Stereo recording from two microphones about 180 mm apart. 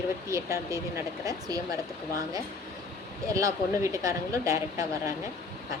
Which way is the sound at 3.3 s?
20° right (ahead or behind).